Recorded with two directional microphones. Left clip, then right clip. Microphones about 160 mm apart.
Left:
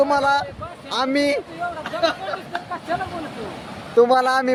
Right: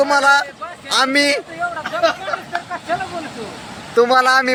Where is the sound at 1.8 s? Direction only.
35° right (ahead or behind).